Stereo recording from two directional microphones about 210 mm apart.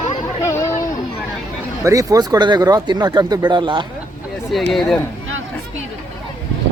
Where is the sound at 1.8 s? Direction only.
15° right (ahead or behind).